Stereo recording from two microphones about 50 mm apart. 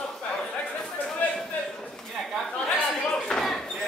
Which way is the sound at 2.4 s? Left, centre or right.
Centre.